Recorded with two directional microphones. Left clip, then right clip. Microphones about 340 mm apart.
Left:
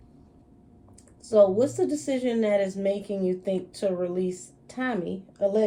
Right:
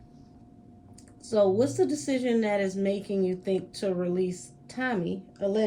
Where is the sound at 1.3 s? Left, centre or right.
Centre.